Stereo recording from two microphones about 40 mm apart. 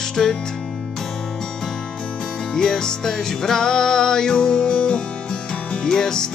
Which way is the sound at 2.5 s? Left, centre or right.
Centre.